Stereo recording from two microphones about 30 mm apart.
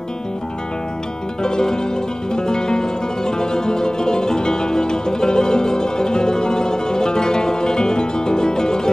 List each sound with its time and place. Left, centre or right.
1.4 s music: left